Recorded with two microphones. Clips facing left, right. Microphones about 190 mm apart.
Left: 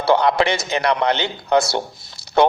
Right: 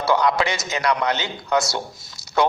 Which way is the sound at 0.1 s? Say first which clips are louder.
Left 4 dB; 30° left (ahead or behind).